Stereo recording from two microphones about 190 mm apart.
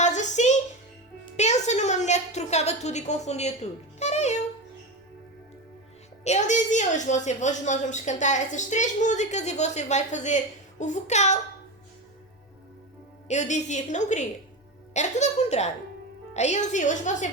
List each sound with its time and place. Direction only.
0.0 s a sound: 40° left (ahead or behind)
6.2 s a woman's voice: 40° left (ahead or behind)
13.2 s a woman's voice: 40° left (ahead or behind)